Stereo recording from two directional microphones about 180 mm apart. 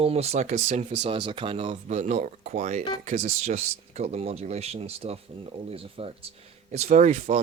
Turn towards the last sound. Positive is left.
turn(degrees=-40)  # may be behind; listen again after turning